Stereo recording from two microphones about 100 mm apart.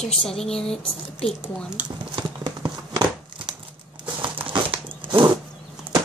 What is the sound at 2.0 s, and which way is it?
Crumpling, 50° right (ahead or behind).